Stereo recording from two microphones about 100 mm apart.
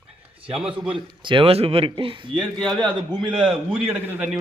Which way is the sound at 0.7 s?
60° right (ahead or behind).